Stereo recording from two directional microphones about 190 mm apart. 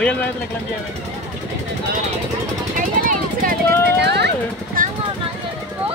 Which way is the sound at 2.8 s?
45° right (ahead or behind).